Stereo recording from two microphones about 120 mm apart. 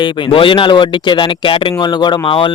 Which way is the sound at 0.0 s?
45° left (ahead or behind).